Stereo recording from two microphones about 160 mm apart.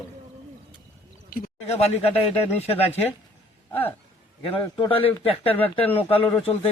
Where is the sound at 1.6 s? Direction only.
40° left (ahead or behind).